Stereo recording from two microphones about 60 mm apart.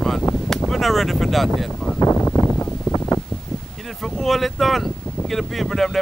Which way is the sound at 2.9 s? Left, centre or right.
Left.